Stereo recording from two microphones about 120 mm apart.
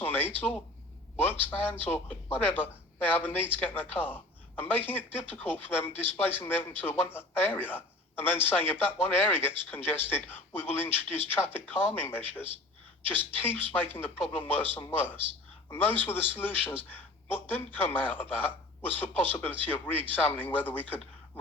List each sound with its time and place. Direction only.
0.0 s a man's voice: 15° left (ahead or behind)